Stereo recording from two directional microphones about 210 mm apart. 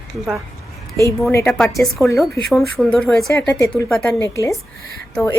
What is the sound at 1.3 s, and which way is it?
A woman's voice, 10° left (ahead or behind).